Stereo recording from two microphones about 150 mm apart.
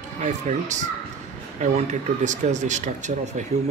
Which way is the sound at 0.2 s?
55° right (ahead or behind).